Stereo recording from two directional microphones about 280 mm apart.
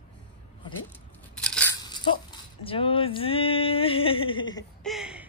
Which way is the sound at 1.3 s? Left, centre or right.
Centre.